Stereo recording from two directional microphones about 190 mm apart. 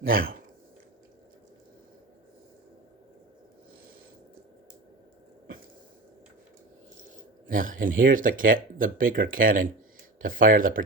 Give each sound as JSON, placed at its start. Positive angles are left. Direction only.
{"t": 0.1, "sound": "speech", "side_deg": -50}
{"t": 7.4, "sound": "speech", "side_deg": -45}